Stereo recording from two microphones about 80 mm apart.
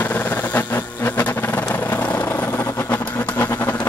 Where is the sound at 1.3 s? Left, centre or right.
Left.